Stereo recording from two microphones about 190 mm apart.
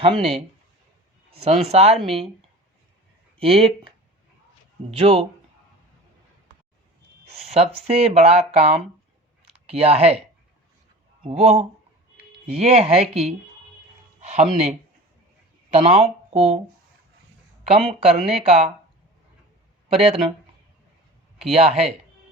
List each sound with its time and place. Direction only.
0.0 s speech: 30° right (ahead or behind)
3.3 s speech: 30° right (ahead or behind)
7.4 s speech: 35° right (ahead or behind)
11.2 s speech: 30° right (ahead or behind)
17.6 s speech: 30° right (ahead or behind)
19.9 s speech: 30° right (ahead or behind)
21.5 s speech: 35° right (ahead or behind)